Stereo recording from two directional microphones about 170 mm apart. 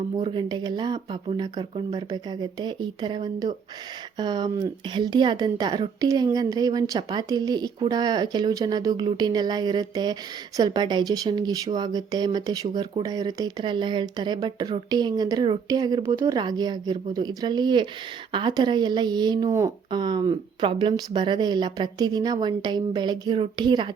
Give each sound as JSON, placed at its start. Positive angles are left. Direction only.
{"t": 0.2, "sound": "speech", "side_deg": -25}